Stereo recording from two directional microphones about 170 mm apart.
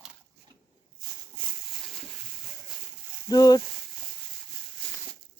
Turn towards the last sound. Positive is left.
turn(degrees=20)  # may be behind; listen again after turning